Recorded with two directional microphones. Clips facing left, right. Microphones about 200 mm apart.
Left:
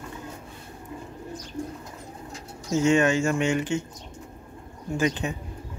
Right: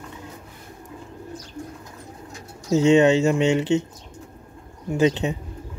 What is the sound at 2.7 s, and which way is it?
Speech, 20° right (ahead or behind).